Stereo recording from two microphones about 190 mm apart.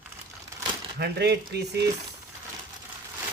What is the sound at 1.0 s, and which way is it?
Speech, 60° right (ahead or behind).